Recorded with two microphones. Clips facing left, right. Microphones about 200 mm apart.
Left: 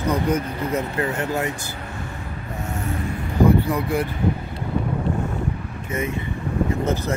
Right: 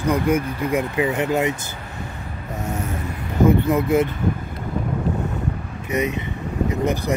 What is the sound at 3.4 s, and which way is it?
Speech, 20° right (ahead or behind).